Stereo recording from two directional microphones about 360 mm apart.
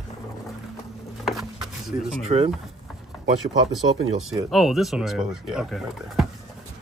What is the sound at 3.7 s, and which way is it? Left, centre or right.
Speech, centre.